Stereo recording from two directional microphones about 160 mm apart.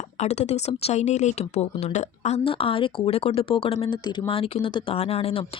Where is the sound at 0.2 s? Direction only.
45° left (ahead or behind).